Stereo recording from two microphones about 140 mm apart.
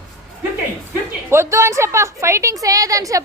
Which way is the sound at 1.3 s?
20° right (ahead or behind).